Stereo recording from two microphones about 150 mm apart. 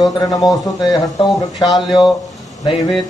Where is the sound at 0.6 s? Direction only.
30° left (ahead or behind).